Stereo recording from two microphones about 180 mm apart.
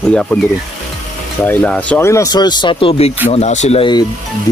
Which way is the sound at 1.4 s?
10° left (ahead or behind).